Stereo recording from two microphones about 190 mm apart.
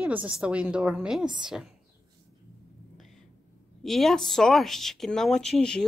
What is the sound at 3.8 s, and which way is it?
A woman's voice, centre (ahead or behind).